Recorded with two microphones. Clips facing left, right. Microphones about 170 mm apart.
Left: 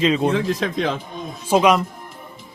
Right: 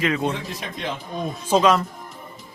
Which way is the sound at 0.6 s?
90° left.